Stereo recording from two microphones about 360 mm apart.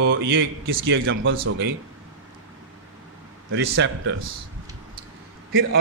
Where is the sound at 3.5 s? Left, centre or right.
Right.